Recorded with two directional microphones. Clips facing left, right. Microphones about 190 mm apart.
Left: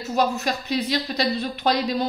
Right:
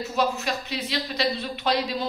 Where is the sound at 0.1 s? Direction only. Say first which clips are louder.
Left 4 dB; 40° left (ahead or behind).